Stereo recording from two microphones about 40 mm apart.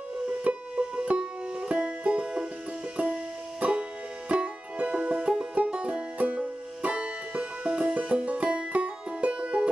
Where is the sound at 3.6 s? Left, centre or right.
Right.